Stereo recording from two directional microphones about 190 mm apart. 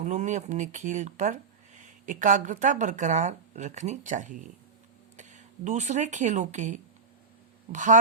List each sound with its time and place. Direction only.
0.0 s speech: 40° right (ahead or behind)